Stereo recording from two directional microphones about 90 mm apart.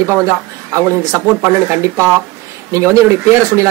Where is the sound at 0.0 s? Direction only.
30° right (ahead or behind).